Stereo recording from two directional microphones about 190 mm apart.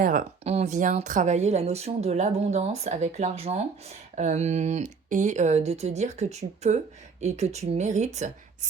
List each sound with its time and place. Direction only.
0.0 s speech: 50° right (ahead or behind)
0.4 s speech: 35° right (ahead or behind)